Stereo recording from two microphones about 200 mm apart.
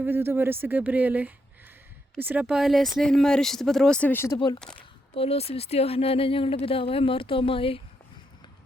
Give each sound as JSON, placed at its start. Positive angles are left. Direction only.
{"t": 0.0, "sound": "speech", "side_deg": -10}
{"t": 4.4, "sound": "speech", "side_deg": 25}